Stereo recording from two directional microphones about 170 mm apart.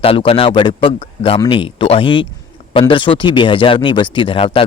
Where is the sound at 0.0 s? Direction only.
35° left (ahead or behind).